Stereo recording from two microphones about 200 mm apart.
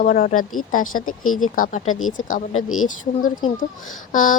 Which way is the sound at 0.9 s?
90° left.